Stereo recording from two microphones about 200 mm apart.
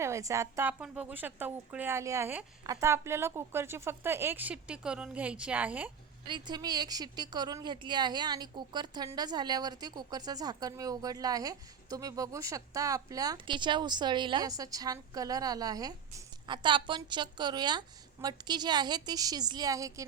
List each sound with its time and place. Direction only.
0.0 s a woman's voice: 15° right (ahead or behind)
6.2 s a woman's voice: 20° right (ahead or behind)